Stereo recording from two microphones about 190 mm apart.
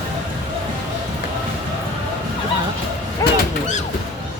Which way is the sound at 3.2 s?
20° left (ahead or behind).